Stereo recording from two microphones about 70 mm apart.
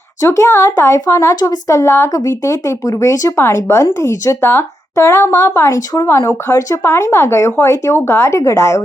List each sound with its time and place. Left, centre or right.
0.3 s speech: left
3.3 s speech: left
4.4 s speech: left
6.5 s speech: left
6.8 s speech: left